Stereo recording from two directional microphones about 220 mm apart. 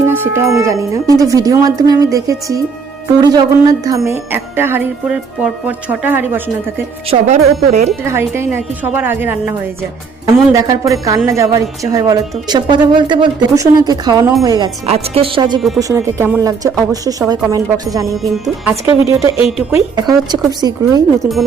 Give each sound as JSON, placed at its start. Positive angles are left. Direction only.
{"t": 0.0, "sound": "speech", "side_deg": -10}
{"t": 7.1, "sound": "speech", "side_deg": -30}
{"t": 8.0, "sound": "speech", "side_deg": -10}
{"t": 14.8, "sound": "speech", "side_deg": -30}
{"t": 18.2, "sound": "speech", "side_deg": 0}
{"t": 18.9, "sound": "speech", "side_deg": -15}